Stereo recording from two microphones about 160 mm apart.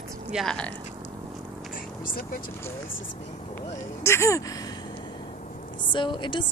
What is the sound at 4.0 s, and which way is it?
Speech, 15° left (ahead or behind).